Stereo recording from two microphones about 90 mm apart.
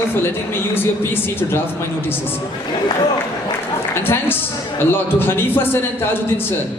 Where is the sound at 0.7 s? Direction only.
25° left (ahead or behind).